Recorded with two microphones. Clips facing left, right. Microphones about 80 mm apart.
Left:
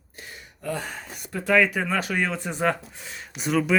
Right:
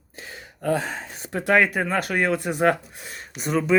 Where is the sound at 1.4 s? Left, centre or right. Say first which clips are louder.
Right 1 dB; right.